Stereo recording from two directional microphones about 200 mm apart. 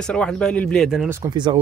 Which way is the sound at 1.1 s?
15° right (ahead or behind).